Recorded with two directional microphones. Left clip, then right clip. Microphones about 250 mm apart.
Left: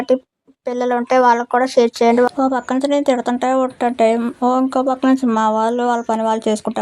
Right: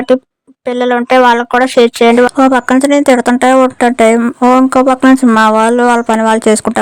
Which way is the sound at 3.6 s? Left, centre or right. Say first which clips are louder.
Right 7 dB; right.